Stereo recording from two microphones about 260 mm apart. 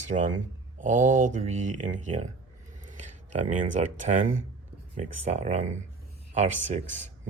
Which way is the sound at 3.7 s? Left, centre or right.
Right.